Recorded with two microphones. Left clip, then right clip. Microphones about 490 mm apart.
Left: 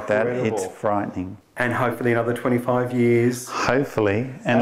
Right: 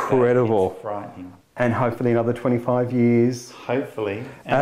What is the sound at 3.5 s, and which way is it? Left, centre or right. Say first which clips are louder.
Speech: left 5 dB; left.